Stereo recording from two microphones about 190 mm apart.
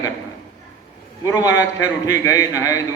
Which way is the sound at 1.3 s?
15° left (ahead or behind).